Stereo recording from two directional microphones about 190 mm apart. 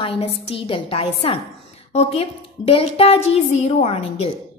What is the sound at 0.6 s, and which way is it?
A woman's voice, 30° left (ahead or behind).